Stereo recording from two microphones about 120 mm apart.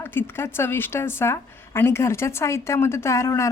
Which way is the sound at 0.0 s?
20° left (ahead or behind).